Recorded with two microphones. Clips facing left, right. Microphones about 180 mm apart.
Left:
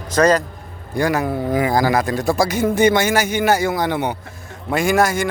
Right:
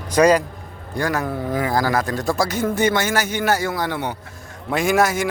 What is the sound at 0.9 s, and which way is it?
A man's voice, 10° left (ahead or behind).